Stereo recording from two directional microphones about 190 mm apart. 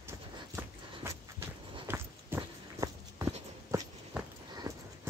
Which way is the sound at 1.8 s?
10° right (ahead or behind).